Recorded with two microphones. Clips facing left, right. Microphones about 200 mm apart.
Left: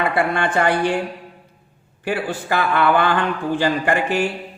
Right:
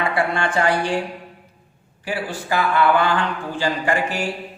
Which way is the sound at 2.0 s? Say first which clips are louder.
Left 4 dB; 60° left (ahead or behind).